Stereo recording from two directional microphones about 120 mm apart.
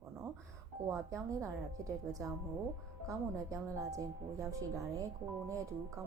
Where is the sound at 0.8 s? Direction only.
25° right (ahead or behind).